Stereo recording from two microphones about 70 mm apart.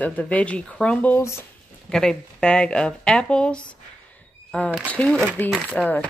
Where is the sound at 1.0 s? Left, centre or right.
Left.